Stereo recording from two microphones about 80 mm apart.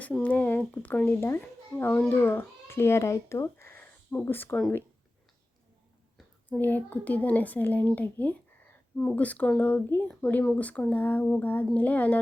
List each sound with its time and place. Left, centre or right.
0.2 s a child's voice: centre
6.6 s speech: left